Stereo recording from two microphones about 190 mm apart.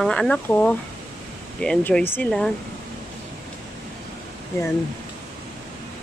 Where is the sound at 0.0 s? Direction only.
5° left (ahead or behind).